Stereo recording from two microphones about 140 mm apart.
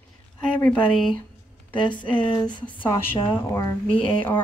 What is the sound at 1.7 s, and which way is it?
A woman's voice, 35° left (ahead or behind).